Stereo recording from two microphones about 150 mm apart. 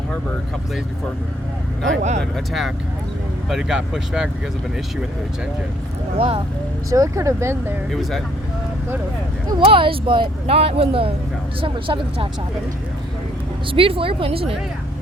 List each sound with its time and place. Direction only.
2.0 s speech: 50° right (ahead or behind)
2.3 s speech: centre (ahead or behind)
6.1 s speech: 40° right (ahead or behind)
6.9 s speech: 20° right (ahead or behind)
9.5 s speech: 35° right (ahead or behind)
13.7 s speech: 40° right (ahead or behind)